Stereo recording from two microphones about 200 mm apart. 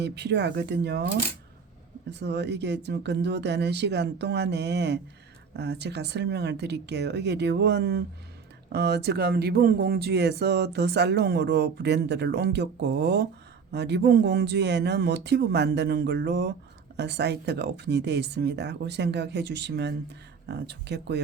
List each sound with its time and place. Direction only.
0.0 s speech: 60° right (ahead or behind)